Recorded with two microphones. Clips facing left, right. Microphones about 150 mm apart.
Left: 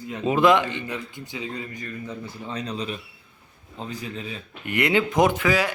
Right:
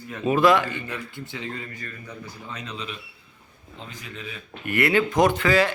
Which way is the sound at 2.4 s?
35° left (ahead or behind).